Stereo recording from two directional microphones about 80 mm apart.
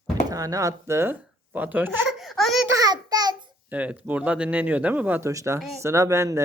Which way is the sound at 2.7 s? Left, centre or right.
Right.